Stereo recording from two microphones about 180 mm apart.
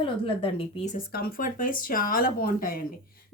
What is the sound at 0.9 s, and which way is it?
Speech, 60° left (ahead or behind).